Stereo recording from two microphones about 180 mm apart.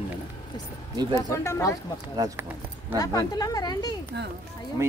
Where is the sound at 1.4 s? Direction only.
15° left (ahead or behind).